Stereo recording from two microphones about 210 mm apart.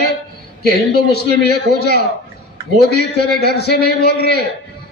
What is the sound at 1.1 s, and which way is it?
A man's voice, 50° left (ahead or behind).